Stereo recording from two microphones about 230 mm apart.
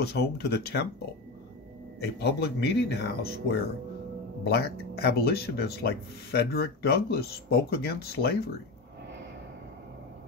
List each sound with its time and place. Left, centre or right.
0.0 s speech: left
2.1 s speech: left